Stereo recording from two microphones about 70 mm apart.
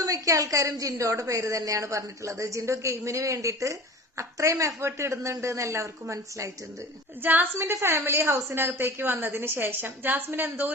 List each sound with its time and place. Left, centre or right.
0.0 s a woman's voice: right
7.2 s a woman's voice: right